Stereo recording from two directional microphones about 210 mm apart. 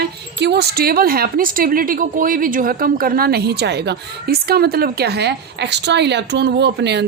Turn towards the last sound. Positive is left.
turn(degrees=-55)  # may be behind; listen again after turning